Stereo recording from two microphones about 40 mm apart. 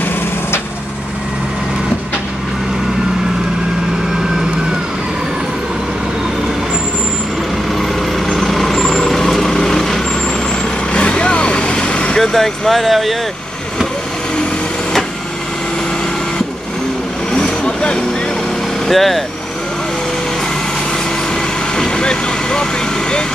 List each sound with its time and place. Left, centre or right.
7.7 s vehicle: centre
10.9 s vehicle: left
12.2 s speech: centre
17.3 s vehicle: centre
18.9 s speech: centre
21.7 s vehicle: centre